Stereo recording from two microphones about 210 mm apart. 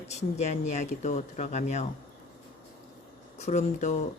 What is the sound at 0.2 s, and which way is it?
Speech, 35° left (ahead or behind).